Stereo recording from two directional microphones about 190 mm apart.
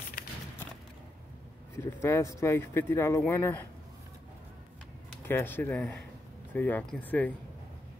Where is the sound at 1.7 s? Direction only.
15° left (ahead or behind).